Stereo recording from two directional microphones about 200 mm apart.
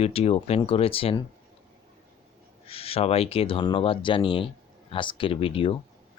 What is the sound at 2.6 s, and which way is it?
Speech, 30° left (ahead or behind).